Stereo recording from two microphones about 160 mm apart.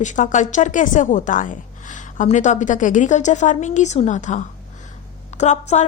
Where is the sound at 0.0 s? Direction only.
50° left (ahead or behind).